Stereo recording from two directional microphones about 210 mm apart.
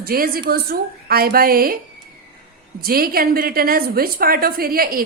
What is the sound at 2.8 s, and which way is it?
A woman's voice, 45° right (ahead or behind).